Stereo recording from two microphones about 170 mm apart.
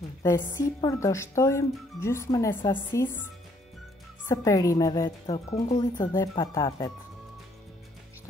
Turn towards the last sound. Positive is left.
turn(degrees=20)  # may be behind; listen again after turning